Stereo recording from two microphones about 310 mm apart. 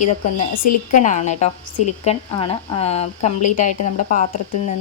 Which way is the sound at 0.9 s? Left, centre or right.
Left.